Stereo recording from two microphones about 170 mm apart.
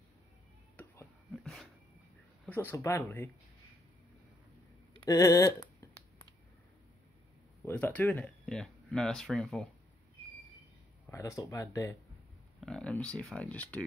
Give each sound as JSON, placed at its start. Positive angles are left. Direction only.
{"t": 0.8, "sound": "a sound", "side_deg": 10}
{"t": 1.3, "sound": "dog", "side_deg": 0}
{"t": 2.4, "sound": "speech", "side_deg": 10}
{"t": 5.0, "sound": "a sound", "side_deg": 20}
{"t": 7.6, "sound": "speech", "side_deg": 10}
{"t": 11.1, "sound": "speech", "side_deg": 15}
{"t": 12.5, "sound": "speech", "side_deg": 5}